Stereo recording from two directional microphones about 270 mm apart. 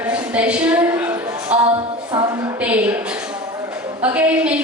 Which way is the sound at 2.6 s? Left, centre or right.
Centre.